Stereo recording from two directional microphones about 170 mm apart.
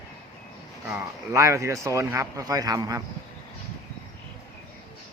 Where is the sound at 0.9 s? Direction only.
15° right (ahead or behind).